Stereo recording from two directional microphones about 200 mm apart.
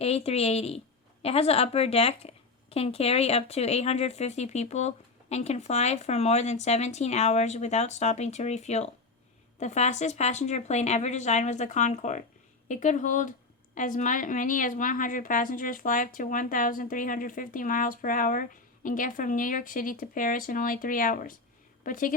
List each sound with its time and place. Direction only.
0.0 s a woman's voice: 30° left (ahead or behind)